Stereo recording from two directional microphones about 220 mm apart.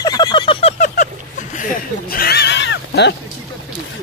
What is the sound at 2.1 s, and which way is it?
Neigh, 45° left (ahead or behind).